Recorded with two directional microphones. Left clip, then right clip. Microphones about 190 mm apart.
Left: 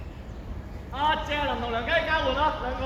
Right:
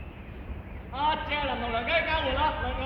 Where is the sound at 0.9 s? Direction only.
55° right (ahead or behind).